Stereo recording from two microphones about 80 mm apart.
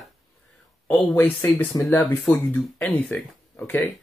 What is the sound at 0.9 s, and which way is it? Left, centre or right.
Speech, left.